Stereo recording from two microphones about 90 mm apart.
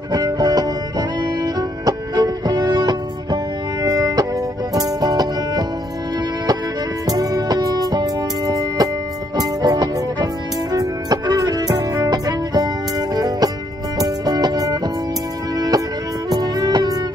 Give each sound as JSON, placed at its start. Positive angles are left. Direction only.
{"t": 0.1, "sound": "music", "side_deg": -45}
{"t": 7.1, "sound": "music", "side_deg": -45}